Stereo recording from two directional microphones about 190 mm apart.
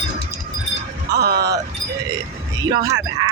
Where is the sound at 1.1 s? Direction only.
60° right (ahead or behind).